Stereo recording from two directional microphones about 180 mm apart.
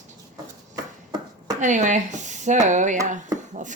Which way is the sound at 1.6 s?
45° right (ahead or behind).